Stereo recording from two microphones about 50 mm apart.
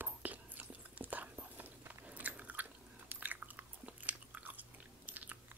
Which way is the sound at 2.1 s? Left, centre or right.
Right.